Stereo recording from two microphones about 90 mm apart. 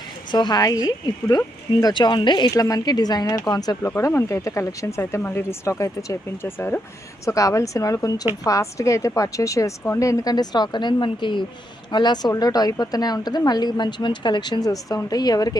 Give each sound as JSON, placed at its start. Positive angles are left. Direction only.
{"t": 0.3, "sound": "a woman's voice", "side_deg": 50}
{"t": 1.8, "sound": "a woman's voice", "side_deg": 60}
{"t": 3.8, "sound": "speech", "side_deg": 30}
{"t": 7.3, "sound": "a woman's voice", "side_deg": 35}